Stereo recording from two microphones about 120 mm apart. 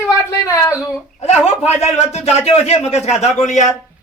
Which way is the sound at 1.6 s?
65° left (ahead or behind).